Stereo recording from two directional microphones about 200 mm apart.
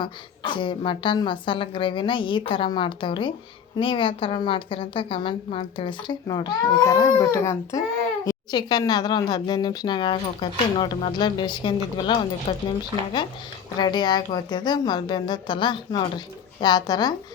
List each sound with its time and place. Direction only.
0.0 s a woman's voice: 25° left (ahead or behind)
13.7 s a woman's voice: 20° left (ahead or behind)